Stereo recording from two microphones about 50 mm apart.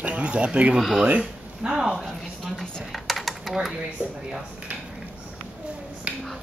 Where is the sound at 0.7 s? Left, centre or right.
Centre.